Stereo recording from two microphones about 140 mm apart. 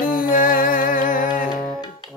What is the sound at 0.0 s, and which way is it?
Music, 75° left (ahead or behind).